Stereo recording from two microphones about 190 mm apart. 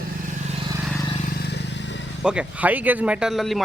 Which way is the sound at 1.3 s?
60° left (ahead or behind).